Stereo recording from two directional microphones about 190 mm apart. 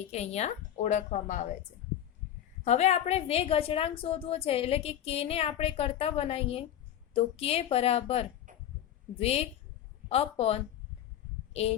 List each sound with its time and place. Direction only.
0.0 s a woman's voice: 35° left (ahead or behind)
2.6 s a woman's voice: 35° left (ahead or behind)
8.5 s a sound: 45° right (ahead or behind)
9.1 s a woman's voice: 30° left (ahead or behind)